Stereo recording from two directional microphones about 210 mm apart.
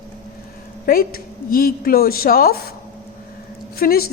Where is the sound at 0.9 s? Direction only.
45° left (ahead or behind).